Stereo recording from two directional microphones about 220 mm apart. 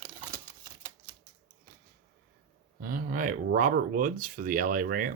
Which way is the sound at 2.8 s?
40° right (ahead or behind).